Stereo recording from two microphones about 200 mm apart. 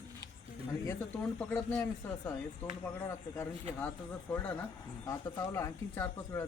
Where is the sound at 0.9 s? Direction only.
10° left (ahead or behind).